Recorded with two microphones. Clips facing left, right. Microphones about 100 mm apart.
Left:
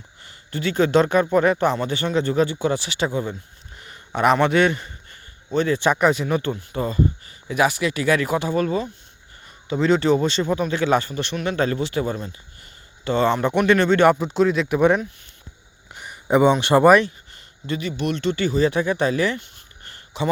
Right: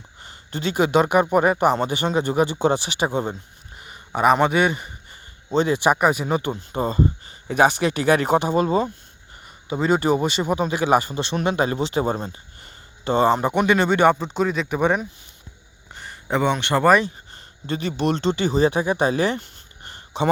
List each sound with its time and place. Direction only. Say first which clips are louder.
0.2 s a man's voice: left 1 dB; 25° right (ahead or behind)
3.8 s a sound: right 1 dB; 10° right (ahead or behind)
4.4 s speech: left 1 dB; 10° right (ahead or behind)
6.2 s speech: even; 20° right (ahead or behind)
9.6 s speech: left 1 dB; 10° right (ahead or behind); by 12.7 s 35° right (ahead or behind)
13.1 s speech: right 1 dB; 20° right (ahead or behind)
14.1 s speech: left 3 dB; centre (ahead or behind)
16.0 s speech: left 5 dB; 10° left (ahead or behind)
17.3 s speech: left 1 dB; 35° right (ahead or behind)
19.8 s a sound: right 3 dB; 20° right (ahead or behind)